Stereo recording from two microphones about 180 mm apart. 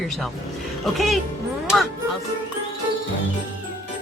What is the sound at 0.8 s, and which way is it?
Speech, centre (ahead or behind).